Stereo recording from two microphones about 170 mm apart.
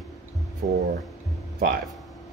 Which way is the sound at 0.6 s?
55° right (ahead or behind).